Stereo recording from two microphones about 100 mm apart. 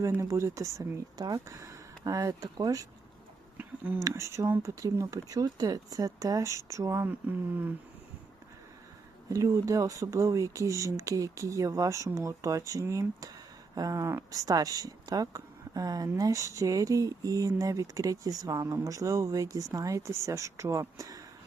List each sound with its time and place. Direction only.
0.2 s speech: 30° right (ahead or behind)
3.6 s speech: 15° right (ahead or behind)
4.0 s speech: 30° right (ahead or behind)
9.3 s speech: 30° right (ahead or behind)